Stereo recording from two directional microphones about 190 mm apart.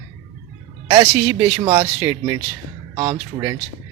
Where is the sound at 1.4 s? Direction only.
25° right (ahead or behind).